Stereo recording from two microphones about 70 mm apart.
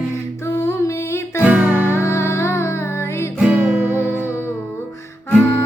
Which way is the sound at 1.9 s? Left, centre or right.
Left.